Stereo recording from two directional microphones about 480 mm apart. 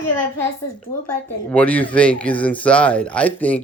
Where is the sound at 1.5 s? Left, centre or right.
Centre.